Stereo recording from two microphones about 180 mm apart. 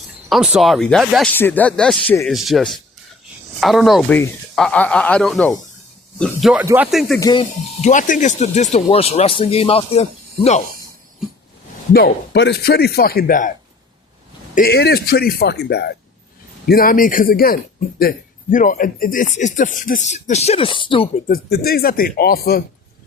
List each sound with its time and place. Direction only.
0.3 s speech: 5° right (ahead or behind)
7.2 s speech: 20° left (ahead or behind)
7.8 s speech: 45° left (ahead or behind)
11.9 s speech: 65° left (ahead or behind); by 13.5 s 50° left (ahead or behind)
14.5 s speech: 60° left (ahead or behind)
16.6 s speech: 55° left (ahead or behind); by 21.1 s 25° left (ahead or behind)
21.2 s speech: 55° left (ahead or behind)